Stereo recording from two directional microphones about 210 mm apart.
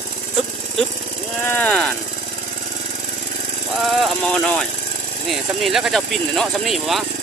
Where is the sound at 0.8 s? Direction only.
35° right (ahead or behind).